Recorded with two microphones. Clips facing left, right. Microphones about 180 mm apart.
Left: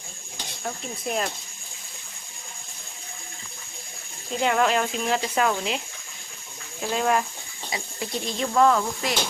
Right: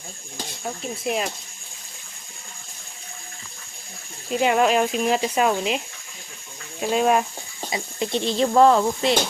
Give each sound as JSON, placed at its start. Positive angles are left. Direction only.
{"t": 0.6, "sound": "speech", "side_deg": -5}
{"t": 4.3, "sound": "speech", "side_deg": -20}
{"t": 6.8, "sound": "speech", "side_deg": -20}